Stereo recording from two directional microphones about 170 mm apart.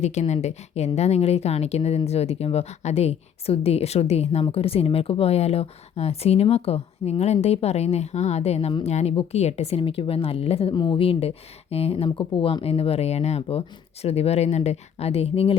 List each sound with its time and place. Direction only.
0.0 s a woman's voice: 40° left (ahead or behind)